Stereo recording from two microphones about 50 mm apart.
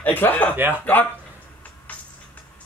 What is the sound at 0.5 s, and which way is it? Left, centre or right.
Speech, right.